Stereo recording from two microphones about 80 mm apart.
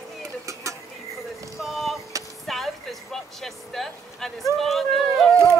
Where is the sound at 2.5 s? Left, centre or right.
Centre.